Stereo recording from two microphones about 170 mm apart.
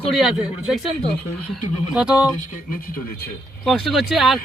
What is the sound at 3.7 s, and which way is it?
Speech, centre (ahead or behind).